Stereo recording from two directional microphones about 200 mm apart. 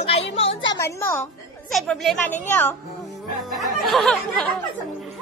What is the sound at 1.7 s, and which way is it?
Speech, centre (ahead or behind).